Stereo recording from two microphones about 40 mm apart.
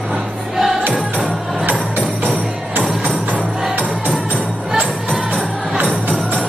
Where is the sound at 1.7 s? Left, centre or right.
Right.